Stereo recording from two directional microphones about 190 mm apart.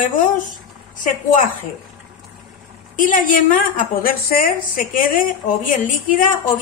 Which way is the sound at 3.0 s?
45° left (ahead or behind).